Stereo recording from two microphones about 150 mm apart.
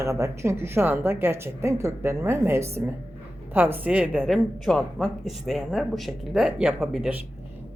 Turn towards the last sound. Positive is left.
turn(degrees=0)  # may be behind; listen again after turning